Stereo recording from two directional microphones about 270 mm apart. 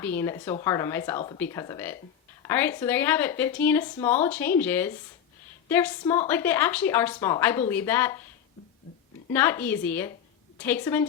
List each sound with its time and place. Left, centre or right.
0.0 s speech: centre
9.3 s speech: centre